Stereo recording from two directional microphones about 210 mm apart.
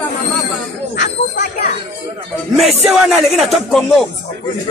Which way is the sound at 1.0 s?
55° left (ahead or behind).